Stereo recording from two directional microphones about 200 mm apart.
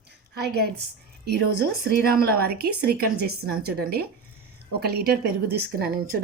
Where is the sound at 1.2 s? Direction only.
55° right (ahead or behind).